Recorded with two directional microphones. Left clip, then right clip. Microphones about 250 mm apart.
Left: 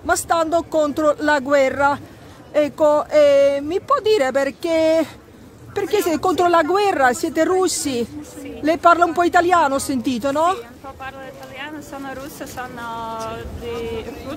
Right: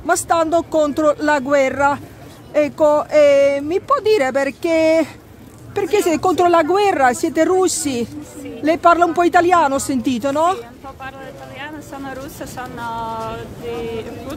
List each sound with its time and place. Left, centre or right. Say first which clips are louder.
0.0 s speech: right 2 dB; centre